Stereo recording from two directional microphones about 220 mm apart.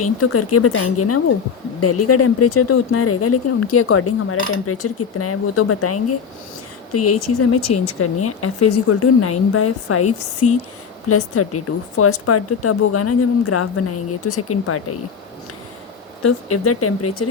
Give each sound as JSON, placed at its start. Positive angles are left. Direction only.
{"t": 0.0, "sound": "a woman's voice", "side_deg": 90}
{"t": 16.2, "sound": "a woman's voice", "side_deg": 90}